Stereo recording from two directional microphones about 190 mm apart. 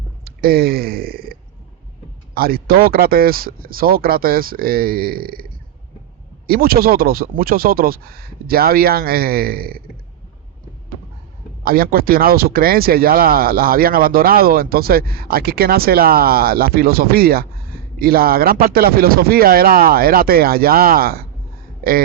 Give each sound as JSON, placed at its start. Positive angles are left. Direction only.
{"t": 0.3, "sound": "a sound", "side_deg": -55}
{"t": 2.3, "sound": "speech", "side_deg": -50}
{"t": 6.5, "sound": "speech", "side_deg": -50}
{"t": 11.6, "sound": "speech", "side_deg": -50}